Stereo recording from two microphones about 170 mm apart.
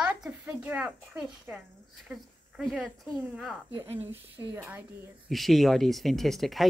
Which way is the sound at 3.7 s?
15° right (ahead or behind).